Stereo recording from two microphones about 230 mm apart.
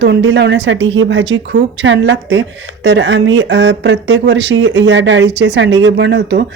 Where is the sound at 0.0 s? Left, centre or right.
Right.